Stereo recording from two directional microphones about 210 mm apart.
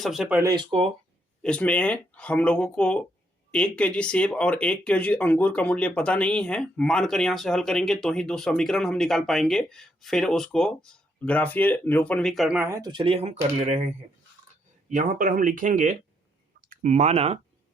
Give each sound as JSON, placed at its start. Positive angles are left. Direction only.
{"t": 0.0, "sound": "speech", "side_deg": 0}
{"t": 0.5, "sound": "speech", "side_deg": -25}
{"t": 1.4, "sound": "speech", "side_deg": 5}